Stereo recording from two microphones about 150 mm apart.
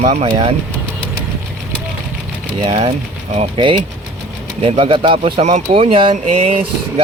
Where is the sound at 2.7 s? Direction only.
45° right (ahead or behind).